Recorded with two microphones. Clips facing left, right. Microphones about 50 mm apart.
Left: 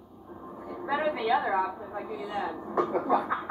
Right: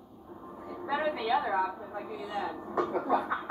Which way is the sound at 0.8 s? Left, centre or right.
Centre.